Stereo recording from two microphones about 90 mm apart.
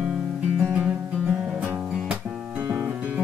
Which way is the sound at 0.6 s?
15° right (ahead or behind).